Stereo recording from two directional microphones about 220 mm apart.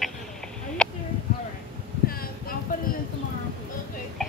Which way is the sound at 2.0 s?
40° left (ahead or behind).